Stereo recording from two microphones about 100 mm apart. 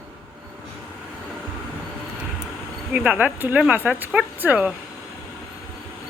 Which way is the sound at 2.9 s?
15° right (ahead or behind).